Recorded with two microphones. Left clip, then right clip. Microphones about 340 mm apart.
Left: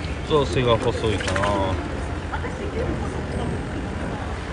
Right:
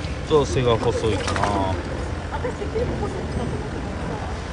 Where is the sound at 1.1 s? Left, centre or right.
Right.